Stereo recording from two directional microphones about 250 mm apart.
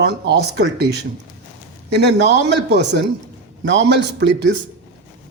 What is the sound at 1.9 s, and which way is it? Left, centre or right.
Speech, right.